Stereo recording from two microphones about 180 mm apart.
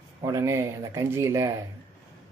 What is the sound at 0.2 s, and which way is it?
Speech, 20° right (ahead or behind).